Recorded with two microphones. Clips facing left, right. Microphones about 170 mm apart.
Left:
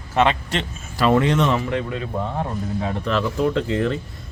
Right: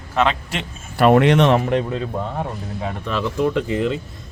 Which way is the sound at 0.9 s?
60° right (ahead or behind).